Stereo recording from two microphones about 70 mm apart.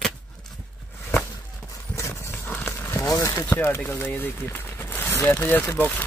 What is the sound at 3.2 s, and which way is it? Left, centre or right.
Speech, left.